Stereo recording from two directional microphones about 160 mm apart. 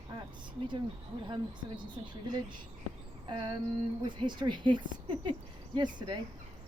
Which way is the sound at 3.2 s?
30° right (ahead or behind).